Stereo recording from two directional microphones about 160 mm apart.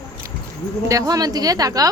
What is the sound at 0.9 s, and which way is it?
A woman's voice, 20° right (ahead or behind).